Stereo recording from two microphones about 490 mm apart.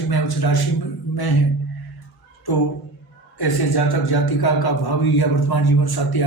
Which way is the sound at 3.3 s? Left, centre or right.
Left.